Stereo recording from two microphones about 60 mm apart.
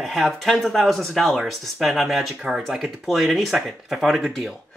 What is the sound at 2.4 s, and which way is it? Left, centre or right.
Speech, centre.